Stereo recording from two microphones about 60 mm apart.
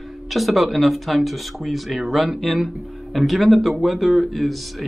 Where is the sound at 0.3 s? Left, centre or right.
Centre.